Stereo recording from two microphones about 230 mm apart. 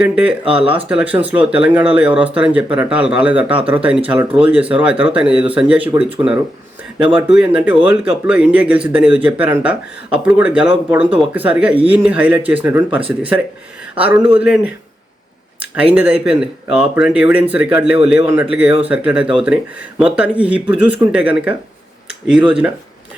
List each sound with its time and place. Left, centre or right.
0.0 s speech: centre
0.4 s speech: right
0.9 s speech: centre
7.2 s speech: centre
15.7 s speech: centre